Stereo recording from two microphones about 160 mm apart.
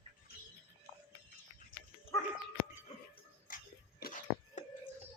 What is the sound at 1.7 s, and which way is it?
Dog, 65° left (ahead or behind).